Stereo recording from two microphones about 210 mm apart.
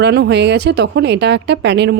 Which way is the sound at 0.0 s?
55° right (ahead or behind).